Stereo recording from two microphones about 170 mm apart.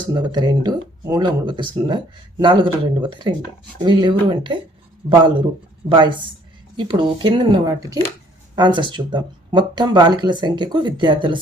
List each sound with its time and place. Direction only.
0.0 s speech: 25° right (ahead or behind)